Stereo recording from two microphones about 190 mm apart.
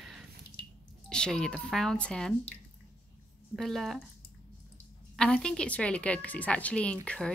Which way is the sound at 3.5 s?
Centre (ahead or behind).